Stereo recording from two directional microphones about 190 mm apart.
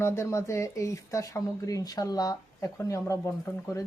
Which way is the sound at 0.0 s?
15° left (ahead or behind).